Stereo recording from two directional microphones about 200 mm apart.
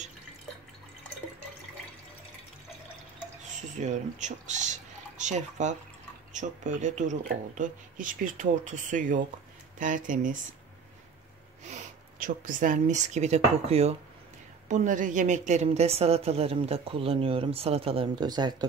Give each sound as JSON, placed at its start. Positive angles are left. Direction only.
{"t": 3.8, "sound": "a woman's voice", "side_deg": -35}
{"t": 11.7, "sound": "a woman's voice", "side_deg": -40}